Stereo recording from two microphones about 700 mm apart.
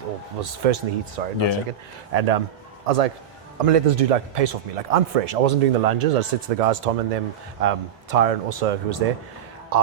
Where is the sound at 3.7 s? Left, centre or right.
Right.